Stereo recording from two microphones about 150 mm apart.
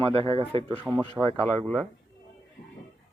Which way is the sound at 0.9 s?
Centre (ahead or behind).